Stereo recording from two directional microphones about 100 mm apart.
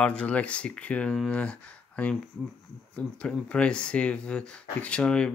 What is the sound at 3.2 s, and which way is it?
Speech, 10° left (ahead or behind).